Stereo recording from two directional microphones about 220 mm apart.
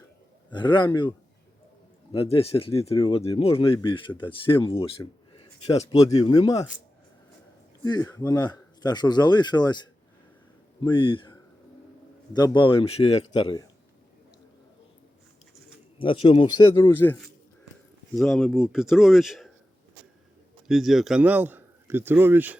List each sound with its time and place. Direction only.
0.5 s speech: 20° left (ahead or behind)
2.1 s speech: 25° left (ahead or behind)
7.9 s speech: 20° left (ahead or behind)
16.0 s speech: 25° left (ahead or behind); by 19.5 s centre (ahead or behind)
20.7 s a man's voice: centre (ahead or behind)